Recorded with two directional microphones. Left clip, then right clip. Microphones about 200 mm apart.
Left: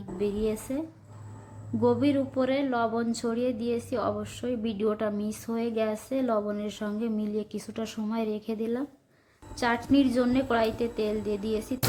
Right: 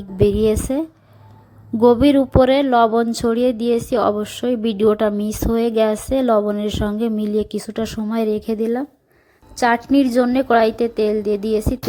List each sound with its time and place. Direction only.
0.2 s speech: 45° right (ahead or behind)